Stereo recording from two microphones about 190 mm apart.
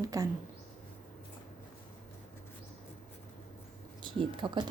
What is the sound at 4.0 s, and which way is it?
Speech, 25° right (ahead or behind).